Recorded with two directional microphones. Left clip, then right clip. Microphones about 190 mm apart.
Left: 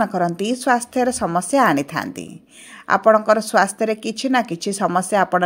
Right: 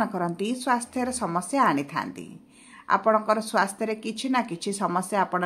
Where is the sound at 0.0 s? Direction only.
35° left (ahead or behind).